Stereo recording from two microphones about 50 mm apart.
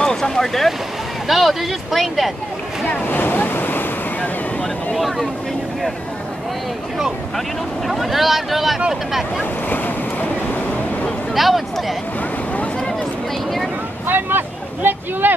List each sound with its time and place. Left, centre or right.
0.0 s speech: centre
3.1 s waves: left
4.2 s waves: left
4.9 s speech: centre
7.3 s speech: centre
9.4 s speech: left
11.3 s speech: centre
14.0 s speech: right